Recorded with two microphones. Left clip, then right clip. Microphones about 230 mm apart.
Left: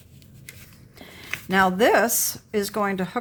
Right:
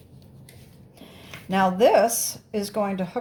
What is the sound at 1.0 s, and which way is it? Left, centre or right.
Speech, left.